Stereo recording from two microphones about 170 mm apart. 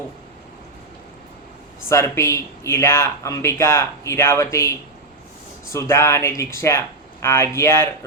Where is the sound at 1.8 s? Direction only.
15° left (ahead or behind).